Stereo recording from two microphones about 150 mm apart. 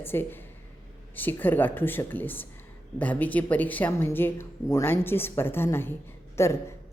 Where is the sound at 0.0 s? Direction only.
15° left (ahead or behind).